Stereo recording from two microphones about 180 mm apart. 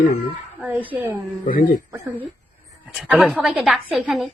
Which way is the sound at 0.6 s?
10° right (ahead or behind).